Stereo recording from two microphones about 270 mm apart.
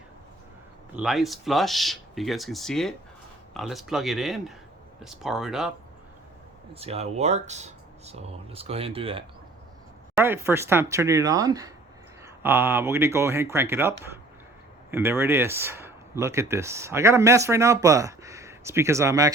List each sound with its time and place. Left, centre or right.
0.9 s speech: centre
6.7 s speech: right
10.2 s speech: centre